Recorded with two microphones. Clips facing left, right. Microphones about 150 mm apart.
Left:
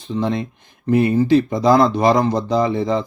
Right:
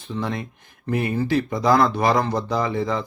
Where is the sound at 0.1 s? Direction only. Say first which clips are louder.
Left 6 dB; 25° left (ahead or behind).